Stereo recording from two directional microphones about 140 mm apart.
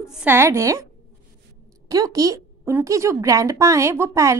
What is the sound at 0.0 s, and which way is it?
Speech, 5° right (ahead or behind).